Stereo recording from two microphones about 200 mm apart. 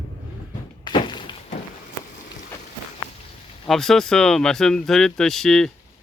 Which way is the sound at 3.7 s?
Centre (ahead or behind).